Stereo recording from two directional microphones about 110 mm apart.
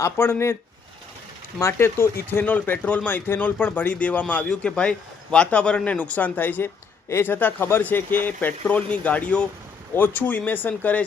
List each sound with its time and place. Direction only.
0.0 s speech: 20° left (ahead or behind)
1.5 s speech: 25° left (ahead or behind)